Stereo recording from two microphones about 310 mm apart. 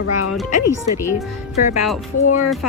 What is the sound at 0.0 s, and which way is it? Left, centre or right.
Speech, left.